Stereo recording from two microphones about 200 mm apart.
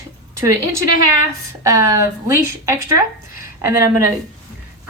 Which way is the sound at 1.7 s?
15° right (ahead or behind).